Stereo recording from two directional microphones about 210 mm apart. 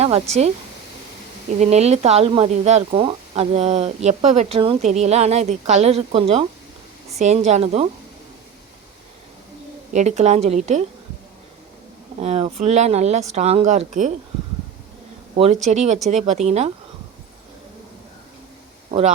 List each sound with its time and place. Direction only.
0.0 s speech: 30° right (ahead or behind)
1.5 s speech: 30° right (ahead or behind)
9.9 s speech: 35° right (ahead or behind)
12.2 s speech: 30° right (ahead or behind)
15.4 s speech: 30° right (ahead or behind)
18.9 s speech: 35° right (ahead or behind)